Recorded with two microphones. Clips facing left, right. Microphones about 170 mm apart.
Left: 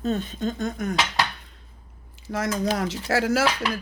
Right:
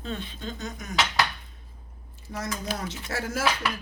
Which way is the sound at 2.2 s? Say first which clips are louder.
Left 8 dB; 90° left.